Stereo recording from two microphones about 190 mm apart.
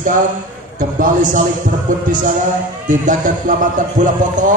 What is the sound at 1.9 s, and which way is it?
A man's voice, 45° right (ahead or behind).